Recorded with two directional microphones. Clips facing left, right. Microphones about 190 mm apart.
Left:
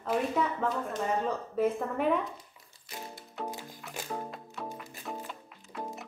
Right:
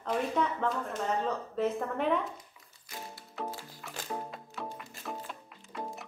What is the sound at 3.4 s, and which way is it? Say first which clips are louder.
Music: left 1 dB; 15° left (ahead or behind).